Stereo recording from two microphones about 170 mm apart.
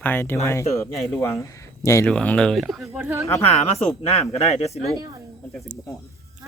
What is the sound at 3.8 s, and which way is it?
Speech, 40° left (ahead or behind).